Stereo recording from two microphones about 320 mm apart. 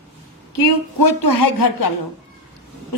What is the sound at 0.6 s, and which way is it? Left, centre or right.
Speech, left.